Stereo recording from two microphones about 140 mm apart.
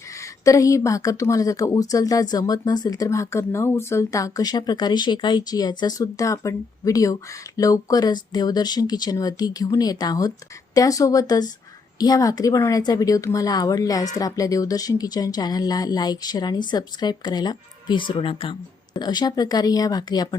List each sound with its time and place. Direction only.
0.2 s speech: 25° left (ahead or behind)